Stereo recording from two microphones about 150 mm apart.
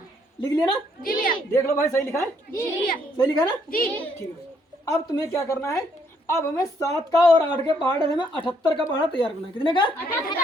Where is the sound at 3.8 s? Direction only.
10° left (ahead or behind); by 9.9 s 35° left (ahead or behind).